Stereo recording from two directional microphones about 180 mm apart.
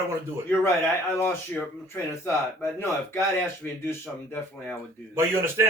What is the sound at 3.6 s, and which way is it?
Speech, 10° left (ahead or behind).